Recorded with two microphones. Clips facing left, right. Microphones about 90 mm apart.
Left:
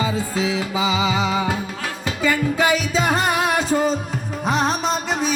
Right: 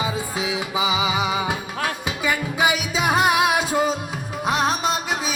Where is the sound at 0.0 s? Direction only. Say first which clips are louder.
Left 3 dB; 15° right (ahead or behind).